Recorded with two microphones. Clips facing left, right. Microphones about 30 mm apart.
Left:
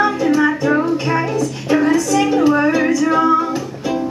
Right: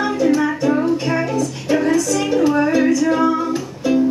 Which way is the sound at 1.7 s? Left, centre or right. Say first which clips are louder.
Left 2 dB; centre.